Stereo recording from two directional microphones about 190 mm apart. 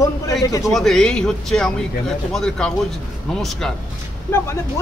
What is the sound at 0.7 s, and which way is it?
A man's voice, centre (ahead or behind).